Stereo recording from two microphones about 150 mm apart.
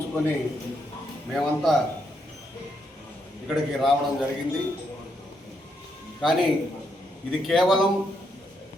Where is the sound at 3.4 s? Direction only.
Centre (ahead or behind).